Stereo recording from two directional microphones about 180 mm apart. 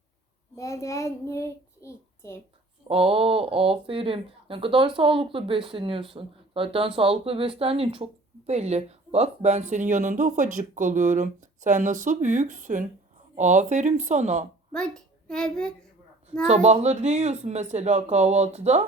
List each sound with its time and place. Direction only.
0.5 s a child's voice: 15° left (ahead or behind)
2.8 s speech: 30° right (ahead or behind)
14.7 s a child's voice: 5° left (ahead or behind)
16.5 s speech: 40° right (ahead or behind)